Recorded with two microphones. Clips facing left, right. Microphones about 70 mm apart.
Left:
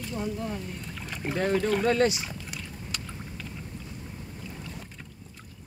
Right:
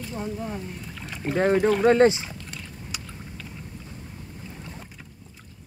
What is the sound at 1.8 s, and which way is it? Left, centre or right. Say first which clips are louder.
Speech: right 6 dB; right.